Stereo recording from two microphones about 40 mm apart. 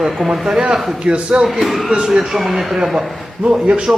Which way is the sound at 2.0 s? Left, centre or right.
Centre.